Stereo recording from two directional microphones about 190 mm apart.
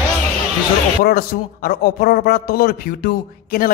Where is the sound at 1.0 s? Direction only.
50° left (ahead or behind).